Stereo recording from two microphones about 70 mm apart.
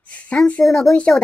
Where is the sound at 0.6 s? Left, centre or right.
Centre.